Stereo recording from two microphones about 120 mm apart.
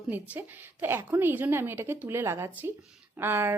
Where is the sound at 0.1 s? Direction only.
15° right (ahead or behind).